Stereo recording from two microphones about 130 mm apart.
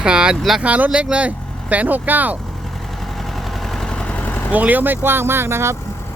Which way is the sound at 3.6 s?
5° left (ahead or behind).